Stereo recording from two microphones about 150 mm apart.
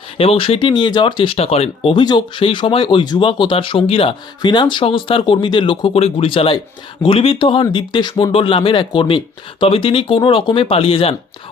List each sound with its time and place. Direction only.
0.2 s speech: 40° left (ahead or behind)
1.9 s speech: 30° left (ahead or behind)